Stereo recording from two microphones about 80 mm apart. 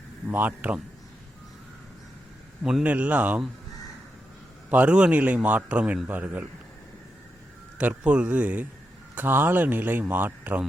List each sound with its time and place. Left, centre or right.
0.3 s a man's voice: right
2.8 s a man's voice: centre
4.7 s a man's voice: centre
7.8 s a man's voice: centre